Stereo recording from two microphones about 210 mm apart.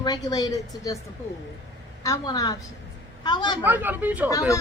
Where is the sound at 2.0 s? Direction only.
15° left (ahead or behind).